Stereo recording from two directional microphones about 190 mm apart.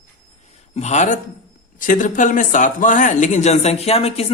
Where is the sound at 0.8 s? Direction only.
35° left (ahead or behind).